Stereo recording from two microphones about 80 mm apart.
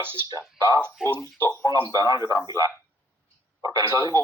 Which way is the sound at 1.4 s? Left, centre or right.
Right.